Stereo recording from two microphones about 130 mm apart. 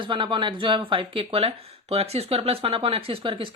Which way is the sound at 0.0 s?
40° right (ahead or behind).